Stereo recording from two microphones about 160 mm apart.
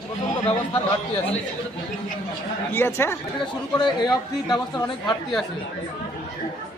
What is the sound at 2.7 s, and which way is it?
Speech, 15° left (ahead or behind).